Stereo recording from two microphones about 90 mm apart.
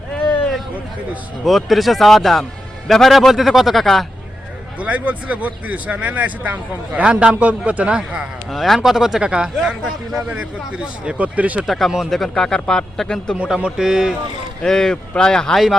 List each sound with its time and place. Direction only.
1.5 s a man's voice: centre (ahead or behind)
4.8 s speech: 15° right (ahead or behind)
8.4 s speech: centre (ahead or behind); by 11.6 s 15° right (ahead or behind)
11.6 s a man's voice: centre (ahead or behind)
13.4 s speech: 10° right (ahead or behind)
14.6 s speech: 5° left (ahead or behind)